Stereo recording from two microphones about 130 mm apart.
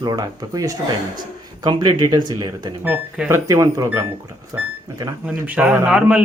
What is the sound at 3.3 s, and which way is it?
Speech, 25° right (ahead or behind).